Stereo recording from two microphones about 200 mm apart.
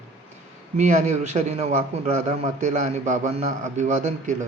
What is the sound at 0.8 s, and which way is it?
A man's voice, 35° right (ahead or behind).